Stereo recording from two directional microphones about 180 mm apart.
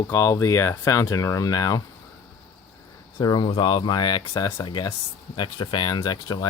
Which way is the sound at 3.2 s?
25° left (ahead or behind).